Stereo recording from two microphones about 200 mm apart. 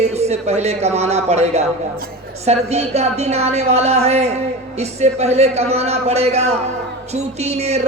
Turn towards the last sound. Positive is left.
turn(degrees=-35)  # may be behind; listen again after turning